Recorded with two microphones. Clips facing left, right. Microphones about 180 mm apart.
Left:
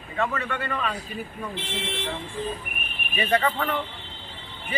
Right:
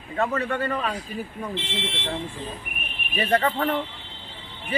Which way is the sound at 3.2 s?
35° right (ahead or behind).